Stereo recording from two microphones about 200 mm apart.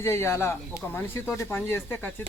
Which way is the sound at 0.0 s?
10° left (ahead or behind).